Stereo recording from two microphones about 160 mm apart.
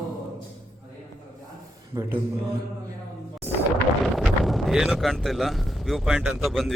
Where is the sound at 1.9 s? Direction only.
20° right (ahead or behind).